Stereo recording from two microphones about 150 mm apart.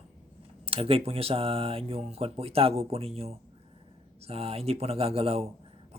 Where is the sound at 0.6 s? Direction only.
40° right (ahead or behind).